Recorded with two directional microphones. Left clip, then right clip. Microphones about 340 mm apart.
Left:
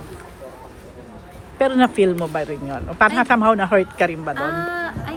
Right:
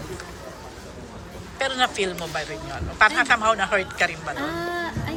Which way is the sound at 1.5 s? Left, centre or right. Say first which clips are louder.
Left 6 dB; centre.